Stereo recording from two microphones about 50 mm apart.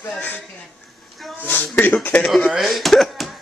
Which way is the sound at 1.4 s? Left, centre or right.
Left.